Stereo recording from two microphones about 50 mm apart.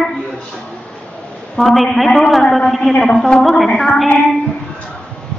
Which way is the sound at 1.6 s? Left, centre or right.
Centre.